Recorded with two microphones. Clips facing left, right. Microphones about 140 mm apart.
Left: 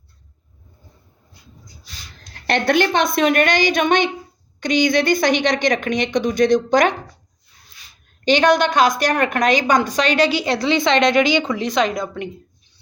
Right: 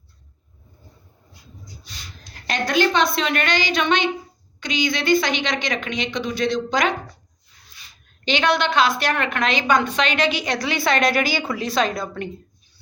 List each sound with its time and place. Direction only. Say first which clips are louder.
2.5 s a woman's voice: left 3 dB; 55° left (ahead or behind)
8.2 s a woman's voice: left 5 dB; 45° left (ahead or behind); by 12.3 s 20° left (ahead or behind)